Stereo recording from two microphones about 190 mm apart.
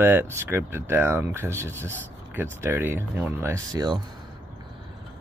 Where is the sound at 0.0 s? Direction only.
10° right (ahead or behind).